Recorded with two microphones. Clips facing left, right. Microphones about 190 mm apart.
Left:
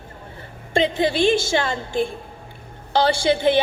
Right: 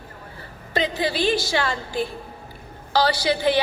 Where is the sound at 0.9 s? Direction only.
25° left (ahead or behind).